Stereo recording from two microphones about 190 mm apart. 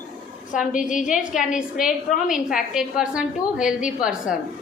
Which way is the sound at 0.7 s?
45° left (ahead or behind).